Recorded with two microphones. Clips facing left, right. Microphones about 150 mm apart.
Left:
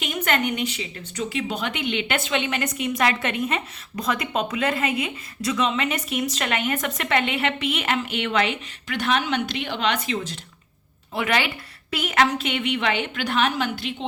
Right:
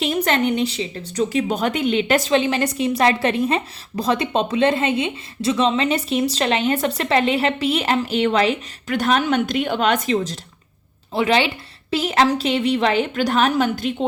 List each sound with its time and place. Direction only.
0.0 s a woman's voice: 30° right (ahead or behind)
11.1 s a woman's voice: 30° right (ahead or behind); by 13.9 s 45° right (ahead or behind)